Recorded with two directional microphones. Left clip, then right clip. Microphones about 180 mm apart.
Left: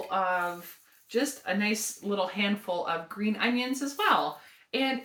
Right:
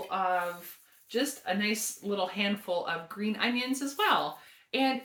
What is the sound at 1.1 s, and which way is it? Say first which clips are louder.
Speech: left 2 dB; 15° right (ahead or behind).